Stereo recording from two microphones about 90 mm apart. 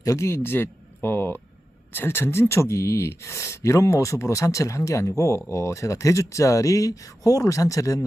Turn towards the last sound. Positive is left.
turn(degrees=35)  # may be behind; listen again after turning